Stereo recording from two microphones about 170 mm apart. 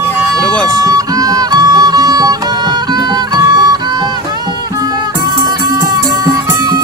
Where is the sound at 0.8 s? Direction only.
20° right (ahead or behind).